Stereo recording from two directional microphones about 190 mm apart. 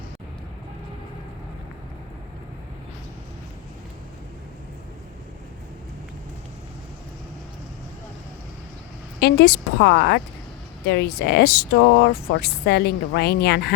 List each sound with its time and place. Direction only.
9.2 s speech: 55° left (ahead or behind)